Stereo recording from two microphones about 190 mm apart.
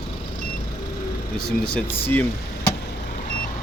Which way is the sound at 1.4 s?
5° left (ahead or behind).